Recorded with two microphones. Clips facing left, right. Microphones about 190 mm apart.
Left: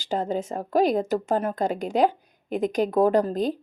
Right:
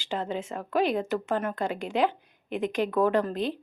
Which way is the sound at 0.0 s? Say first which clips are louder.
Left 5 dB; 40° left (ahead or behind).